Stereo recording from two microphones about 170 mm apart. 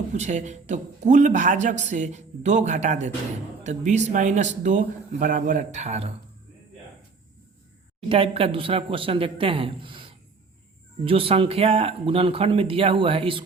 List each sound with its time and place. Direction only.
0.1 s a man's voice: 45° right (ahead or behind)
8.1 s speech: 35° right (ahead or behind)